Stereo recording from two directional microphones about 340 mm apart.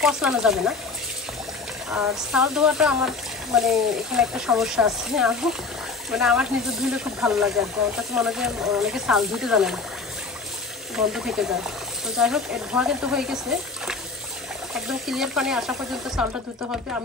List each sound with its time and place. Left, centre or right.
0.0 s speech: centre
1.9 s speech: centre
11.0 s speech: centre
14.7 s speech: centre